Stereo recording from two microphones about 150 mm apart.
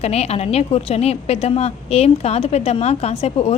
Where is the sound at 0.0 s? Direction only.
45° left (ahead or behind).